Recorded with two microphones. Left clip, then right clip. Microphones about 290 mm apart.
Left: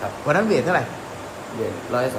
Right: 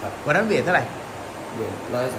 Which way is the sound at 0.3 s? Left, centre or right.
Centre.